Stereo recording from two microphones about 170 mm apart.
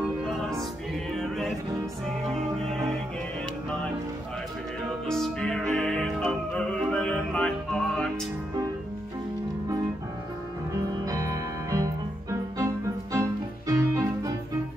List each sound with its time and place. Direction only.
1.1 s music: centre (ahead or behind)
5.0 s music: 5° left (ahead or behind)
11.1 s music: 20° right (ahead or behind)